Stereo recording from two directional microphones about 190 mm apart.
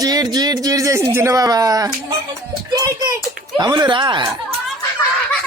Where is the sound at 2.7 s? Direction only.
20° right (ahead or behind).